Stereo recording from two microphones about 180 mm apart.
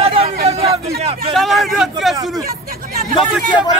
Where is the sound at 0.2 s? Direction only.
35° right (ahead or behind).